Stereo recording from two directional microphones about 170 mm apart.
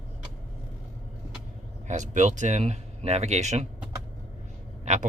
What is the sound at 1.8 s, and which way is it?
Speech, 45° right (ahead or behind).